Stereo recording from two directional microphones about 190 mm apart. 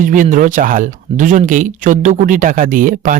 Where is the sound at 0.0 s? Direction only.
45° right (ahead or behind).